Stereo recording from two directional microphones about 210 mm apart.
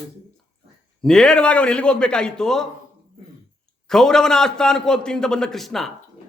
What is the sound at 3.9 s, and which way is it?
A man's voice, centre (ahead or behind).